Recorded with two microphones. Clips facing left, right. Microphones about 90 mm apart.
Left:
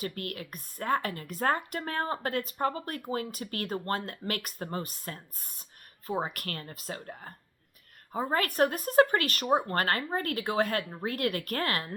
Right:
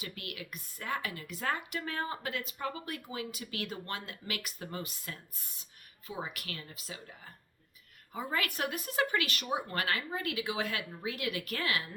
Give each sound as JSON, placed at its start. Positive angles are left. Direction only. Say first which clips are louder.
{"t": 0.0, "sound": "a woman's voice", "louder": "left 7 dB", "side_deg": 45}